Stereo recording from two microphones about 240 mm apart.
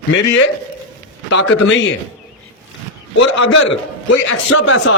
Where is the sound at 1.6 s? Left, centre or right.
Left.